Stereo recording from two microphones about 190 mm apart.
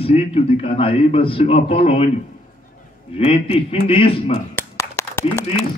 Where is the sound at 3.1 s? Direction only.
30° left (ahead or behind).